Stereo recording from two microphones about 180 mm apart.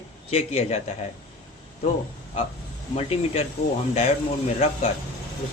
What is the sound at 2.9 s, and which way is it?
Speech, 35° left (ahead or behind).